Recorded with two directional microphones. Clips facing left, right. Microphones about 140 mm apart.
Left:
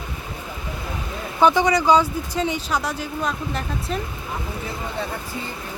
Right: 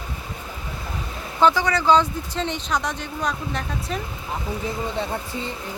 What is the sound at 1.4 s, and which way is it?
Speech, 15° left (ahead or behind).